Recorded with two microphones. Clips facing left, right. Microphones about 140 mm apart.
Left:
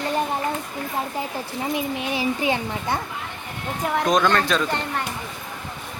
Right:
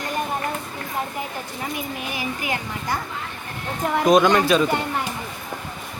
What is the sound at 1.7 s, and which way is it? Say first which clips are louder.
A child's voice: left 6 dB; 25° left (ahead or behind).